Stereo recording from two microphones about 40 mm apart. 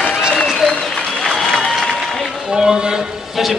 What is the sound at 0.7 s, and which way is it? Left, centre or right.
Applause, centre.